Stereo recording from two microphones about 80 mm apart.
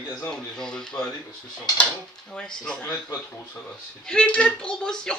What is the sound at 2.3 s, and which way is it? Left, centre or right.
Speech, centre.